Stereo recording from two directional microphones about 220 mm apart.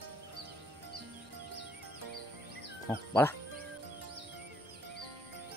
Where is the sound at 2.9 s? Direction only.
10° left (ahead or behind).